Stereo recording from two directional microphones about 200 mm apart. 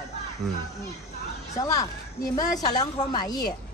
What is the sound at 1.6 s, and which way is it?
A woman's voice, 15° left (ahead or behind).